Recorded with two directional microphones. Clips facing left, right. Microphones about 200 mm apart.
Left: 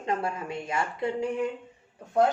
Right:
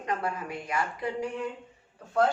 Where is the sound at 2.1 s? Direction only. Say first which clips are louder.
Left 2 dB; 20° left (ahead or behind).